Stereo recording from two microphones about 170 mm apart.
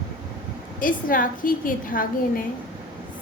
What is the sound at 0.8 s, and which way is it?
A woman's voice, 55° left (ahead or behind).